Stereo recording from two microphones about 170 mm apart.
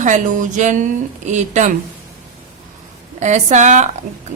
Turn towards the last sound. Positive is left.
turn(degrees=-45)  # may be behind; listen again after turning